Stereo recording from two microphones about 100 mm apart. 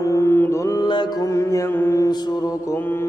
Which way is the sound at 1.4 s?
30° left (ahead or behind).